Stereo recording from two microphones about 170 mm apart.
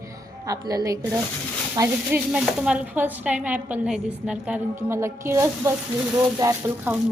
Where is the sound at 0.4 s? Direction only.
20° right (ahead or behind).